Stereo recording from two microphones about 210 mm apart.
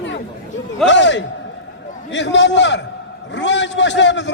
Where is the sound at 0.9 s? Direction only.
60° left (ahead or behind).